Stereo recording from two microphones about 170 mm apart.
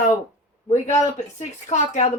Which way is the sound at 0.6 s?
45° left (ahead or behind).